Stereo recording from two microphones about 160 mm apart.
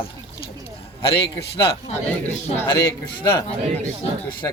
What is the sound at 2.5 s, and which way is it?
Speech, 15° left (ahead or behind).